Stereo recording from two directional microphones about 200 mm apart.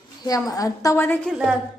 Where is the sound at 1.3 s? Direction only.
5° right (ahead or behind).